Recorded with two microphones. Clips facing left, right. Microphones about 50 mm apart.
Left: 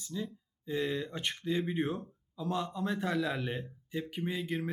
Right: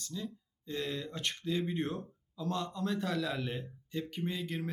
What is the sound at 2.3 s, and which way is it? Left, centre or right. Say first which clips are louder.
Speech: left 2 dB; centre.